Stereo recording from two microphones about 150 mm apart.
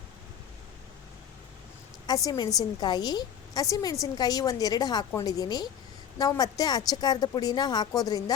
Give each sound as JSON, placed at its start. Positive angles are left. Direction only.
{"t": 2.0, "sound": "a woman's voice", "side_deg": 25}